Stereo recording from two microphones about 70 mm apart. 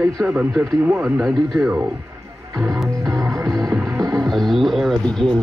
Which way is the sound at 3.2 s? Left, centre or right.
Right.